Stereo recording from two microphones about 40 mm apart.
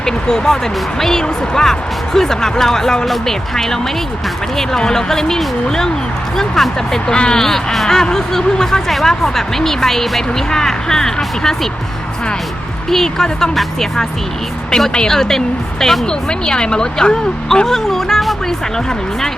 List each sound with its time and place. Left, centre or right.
0.0 s speech: centre
4.8 s speech: centre
12.9 s speech: centre
15.1 s speech: centre
16.0 s speech: centre
17.7 s speech: centre